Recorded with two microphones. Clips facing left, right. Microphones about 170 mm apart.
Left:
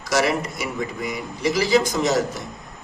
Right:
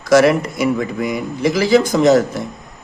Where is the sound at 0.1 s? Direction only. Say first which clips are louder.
Right 9 dB; 55° right (ahead or behind).